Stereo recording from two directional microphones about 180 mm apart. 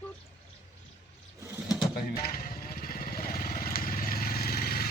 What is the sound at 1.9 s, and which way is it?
Vehicle, 55° left (ahead or behind).